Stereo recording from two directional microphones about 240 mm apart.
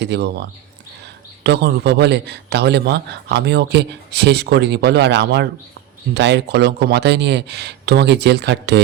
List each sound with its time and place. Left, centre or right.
0.0 s a man's voice: right
1.5 s a man's voice: right